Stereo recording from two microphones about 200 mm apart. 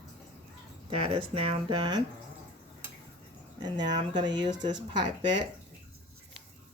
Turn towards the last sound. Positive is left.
turn(degrees=-20)  # may be behind; listen again after turning